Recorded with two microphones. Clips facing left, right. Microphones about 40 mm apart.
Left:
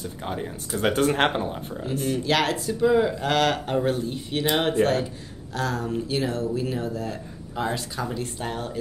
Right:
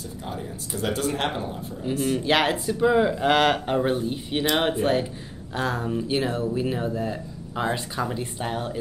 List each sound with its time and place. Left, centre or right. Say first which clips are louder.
0.2 s speech: left 3 dB; left
1.3 s speech: left 3 dB; left
2.1 s speech: right 1 dB; centre
4.8 s speech: left 5 dB; left
5.5 s speech: right 1 dB; right